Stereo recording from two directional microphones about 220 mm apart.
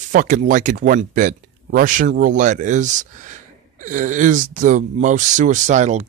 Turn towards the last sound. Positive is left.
turn(degrees=-35)  # may be behind; listen again after turning